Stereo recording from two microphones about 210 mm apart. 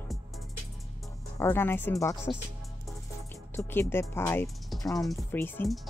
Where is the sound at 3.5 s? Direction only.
10° left (ahead or behind).